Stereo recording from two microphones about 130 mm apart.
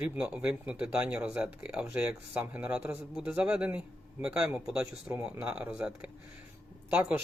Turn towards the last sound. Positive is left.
turn(degrees=-10)  # may be behind; listen again after turning